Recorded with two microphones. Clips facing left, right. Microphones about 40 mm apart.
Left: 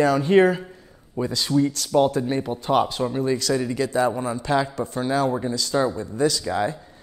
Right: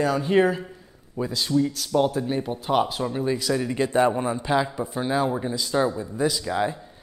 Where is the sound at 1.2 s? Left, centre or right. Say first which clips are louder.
Left 2 dB; centre.